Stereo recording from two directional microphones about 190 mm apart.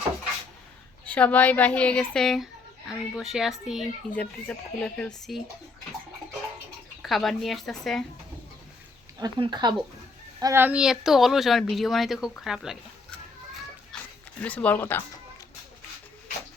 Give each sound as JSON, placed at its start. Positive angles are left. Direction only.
{"t": 1.0, "sound": "speech", "side_deg": 10}
{"t": 7.0, "sound": "speech", "side_deg": 0}
{"t": 9.1, "sound": "speech", "side_deg": -20}
{"t": 10.4, "sound": "speech", "side_deg": -10}
{"t": 14.4, "sound": "speech", "side_deg": 10}